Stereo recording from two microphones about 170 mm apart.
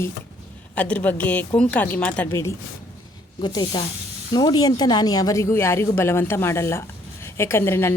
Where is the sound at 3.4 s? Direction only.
25° left (ahead or behind).